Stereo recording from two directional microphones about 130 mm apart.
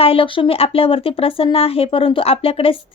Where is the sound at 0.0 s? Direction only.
45° left (ahead or behind).